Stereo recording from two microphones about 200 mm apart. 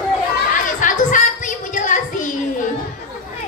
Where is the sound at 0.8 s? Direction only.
40° left (ahead or behind).